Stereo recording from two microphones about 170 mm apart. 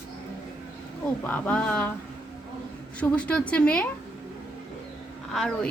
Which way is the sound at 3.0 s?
5° left (ahead or behind).